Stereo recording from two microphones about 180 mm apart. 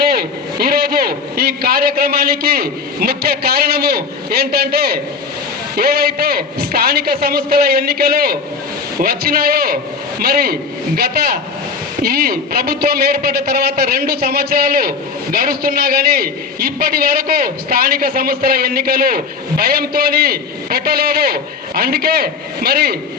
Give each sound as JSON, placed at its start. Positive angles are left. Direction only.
{"t": 0.1, "sound": "a man's voice", "side_deg": -55}